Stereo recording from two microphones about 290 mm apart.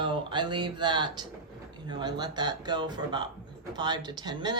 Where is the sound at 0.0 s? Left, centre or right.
Centre.